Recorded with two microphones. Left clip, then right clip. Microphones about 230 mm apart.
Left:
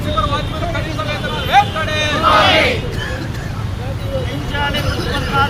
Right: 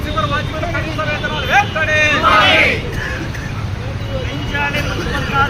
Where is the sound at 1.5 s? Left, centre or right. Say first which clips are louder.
Even; centre.